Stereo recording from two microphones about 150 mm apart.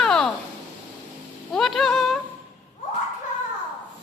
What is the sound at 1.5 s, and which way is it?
Speech, centre (ahead or behind).